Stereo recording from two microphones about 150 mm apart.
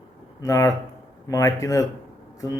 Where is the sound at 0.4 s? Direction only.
20° left (ahead or behind).